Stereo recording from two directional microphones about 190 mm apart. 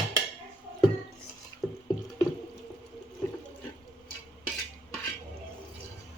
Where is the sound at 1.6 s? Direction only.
Centre (ahead or behind).